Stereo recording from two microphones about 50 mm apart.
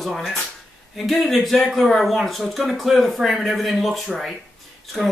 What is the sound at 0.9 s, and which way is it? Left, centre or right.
Speech, centre.